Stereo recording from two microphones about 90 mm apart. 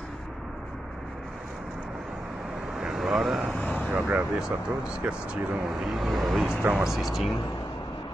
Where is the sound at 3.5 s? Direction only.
10° left (ahead or behind).